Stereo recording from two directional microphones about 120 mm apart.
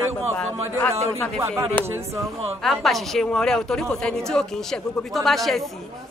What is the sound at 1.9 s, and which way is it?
Speech, 20° right (ahead or behind).